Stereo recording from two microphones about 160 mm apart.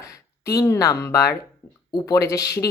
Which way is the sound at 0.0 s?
20° left (ahead or behind).